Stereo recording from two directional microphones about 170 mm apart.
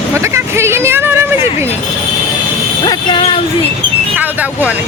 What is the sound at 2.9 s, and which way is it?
Speech, 25° left (ahead or behind).